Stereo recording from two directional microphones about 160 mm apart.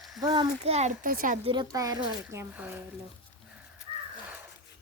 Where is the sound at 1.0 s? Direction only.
60° right (ahead or behind).